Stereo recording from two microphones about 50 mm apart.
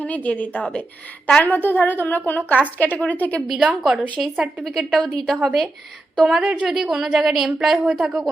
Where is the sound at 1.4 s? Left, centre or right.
Left.